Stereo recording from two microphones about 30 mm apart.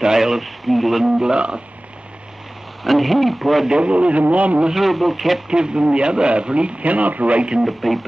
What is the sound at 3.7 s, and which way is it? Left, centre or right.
Speech, right.